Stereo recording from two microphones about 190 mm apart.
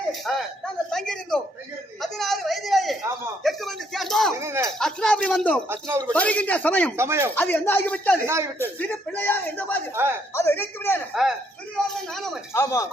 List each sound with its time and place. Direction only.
0.3 s speech: 5° left (ahead or behind)
2.0 s a sound: centre (ahead or behind)
3.4 s speech: centre (ahead or behind)
4.4 s a man's voice: 15° right (ahead or behind)
4.8 s speech: centre (ahead or behind)
5.6 s a man's voice: 10° right (ahead or behind)
6.1 s speech: 5° left (ahead or behind)
6.9 s a man's voice: 15° right (ahead or behind)
7.3 s speech: 10° left (ahead or behind)
9.9 s a man's voice: 10° right (ahead or behind)
10.3 s speech: 15° left (ahead or behind)
11.1 s speech: centre (ahead or behind)
12.5 s speech: 15° left (ahead or behind)